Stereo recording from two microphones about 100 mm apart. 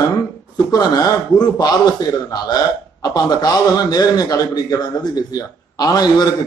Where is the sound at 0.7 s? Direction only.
45° left (ahead or behind).